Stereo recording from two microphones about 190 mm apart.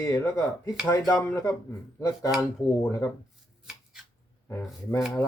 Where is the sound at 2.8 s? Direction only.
10° left (ahead or behind).